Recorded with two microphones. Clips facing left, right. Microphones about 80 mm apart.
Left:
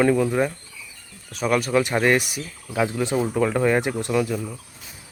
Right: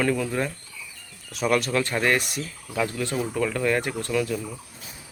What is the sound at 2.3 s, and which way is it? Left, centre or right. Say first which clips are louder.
Speech: left 1 dB; centre.